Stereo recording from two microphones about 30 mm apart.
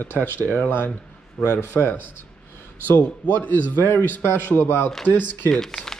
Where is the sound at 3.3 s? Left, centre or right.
Left.